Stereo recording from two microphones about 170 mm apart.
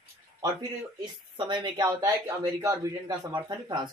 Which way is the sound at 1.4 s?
25° right (ahead or behind).